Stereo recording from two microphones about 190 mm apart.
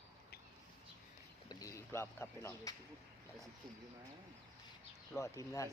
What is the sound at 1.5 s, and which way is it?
Speech, 20° left (ahead or behind).